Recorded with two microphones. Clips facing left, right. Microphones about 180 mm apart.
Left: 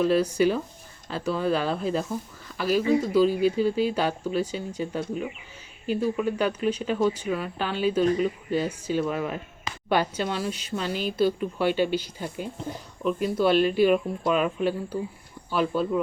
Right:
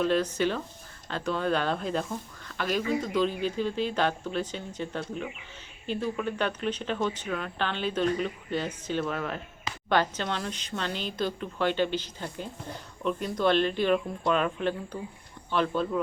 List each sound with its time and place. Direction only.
0.0 s speech: 10° left (ahead or behind)